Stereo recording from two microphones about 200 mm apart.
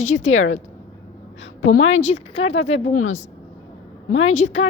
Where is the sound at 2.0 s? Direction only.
30° left (ahead or behind).